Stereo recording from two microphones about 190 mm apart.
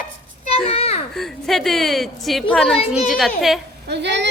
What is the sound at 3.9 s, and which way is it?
Speech, 65° right (ahead or behind).